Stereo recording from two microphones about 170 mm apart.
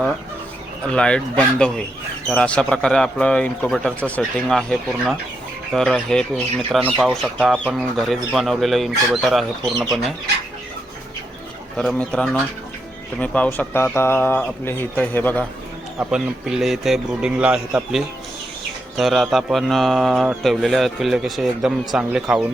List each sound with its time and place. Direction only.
0.9 s speech: 5° left (ahead or behind)
11.8 s speech: 5° left (ahead or behind)
16.1 s speech: 5° right (ahead or behind)